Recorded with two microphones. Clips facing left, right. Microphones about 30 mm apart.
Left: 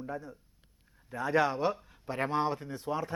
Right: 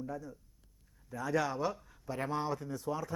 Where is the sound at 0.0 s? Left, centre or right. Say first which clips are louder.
Left 2 dB; left.